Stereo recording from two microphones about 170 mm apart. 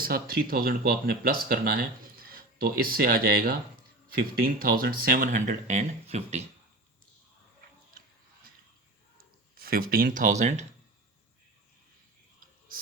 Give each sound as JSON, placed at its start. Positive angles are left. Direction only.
{"t": 0.0, "sound": "speech", "side_deg": -60}
{"t": 9.1, "sound": "speech", "side_deg": -60}
{"t": 12.4, "sound": "whispering", "side_deg": -60}